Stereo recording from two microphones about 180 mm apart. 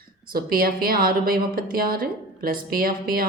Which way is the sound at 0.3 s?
55° right (ahead or behind).